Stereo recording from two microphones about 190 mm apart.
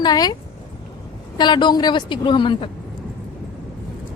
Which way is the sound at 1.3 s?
25° left (ahead or behind).